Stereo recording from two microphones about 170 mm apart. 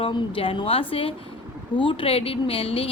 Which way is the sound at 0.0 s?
30° left (ahead or behind).